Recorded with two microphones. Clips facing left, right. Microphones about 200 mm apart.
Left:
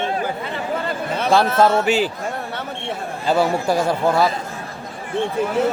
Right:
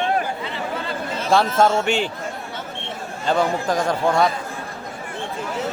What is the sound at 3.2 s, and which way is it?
A man's voice, 5° left (ahead or behind).